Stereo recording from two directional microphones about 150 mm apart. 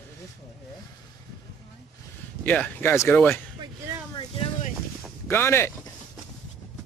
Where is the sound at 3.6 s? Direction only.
30° right (ahead or behind).